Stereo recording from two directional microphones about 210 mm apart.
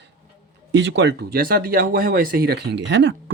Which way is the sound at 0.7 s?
60° right (ahead or behind).